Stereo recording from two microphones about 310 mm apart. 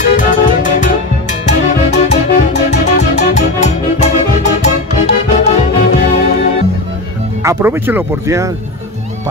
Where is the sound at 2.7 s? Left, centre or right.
Left.